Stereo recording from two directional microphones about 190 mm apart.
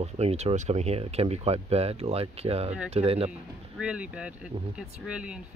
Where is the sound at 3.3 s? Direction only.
5° right (ahead or behind).